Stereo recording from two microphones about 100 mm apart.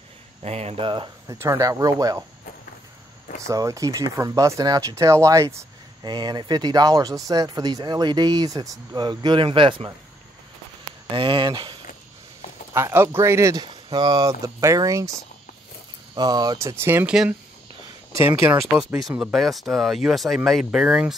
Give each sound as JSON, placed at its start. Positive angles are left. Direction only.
{"t": 0.4, "sound": "speech", "side_deg": -90}
{"t": 1.2, "sound": "speech", "side_deg": -35}
{"t": 3.3, "sound": "speech", "side_deg": -30}
{"t": 6.0, "sound": "speech", "side_deg": -45}
{"t": 11.1, "sound": "speech", "side_deg": -60}
{"t": 12.7, "sound": "speech", "side_deg": -25}
{"t": 13.6, "sound": "speech", "side_deg": -50}
{"t": 16.2, "sound": "speech", "side_deg": -40}
{"t": 16.5, "sound": "speech", "side_deg": -25}
{"t": 18.1, "sound": "speech", "side_deg": -25}
{"t": 18.9, "sound": "speech", "side_deg": -5}
{"t": 20.8, "sound": "speech", "side_deg": -10}